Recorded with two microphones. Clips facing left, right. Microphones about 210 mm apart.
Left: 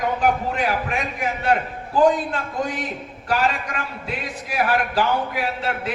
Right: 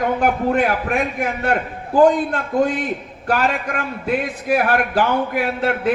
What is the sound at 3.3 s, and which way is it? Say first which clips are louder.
A man's voice: right 3 dB; 55° right (ahead or behind).